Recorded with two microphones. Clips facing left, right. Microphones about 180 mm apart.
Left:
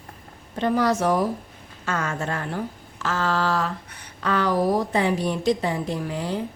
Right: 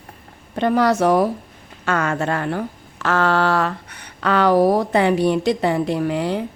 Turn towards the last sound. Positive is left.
turn(degrees=-70)  # may be behind; listen again after turning